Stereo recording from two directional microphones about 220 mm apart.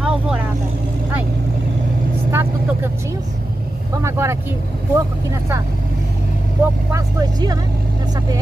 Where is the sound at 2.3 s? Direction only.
10° right (ahead or behind).